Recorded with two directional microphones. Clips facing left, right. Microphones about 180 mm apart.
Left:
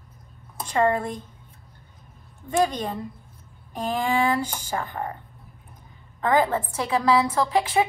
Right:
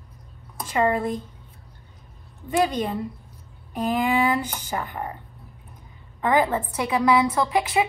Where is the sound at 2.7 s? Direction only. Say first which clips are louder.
Right 3 dB; 10° right (ahead or behind).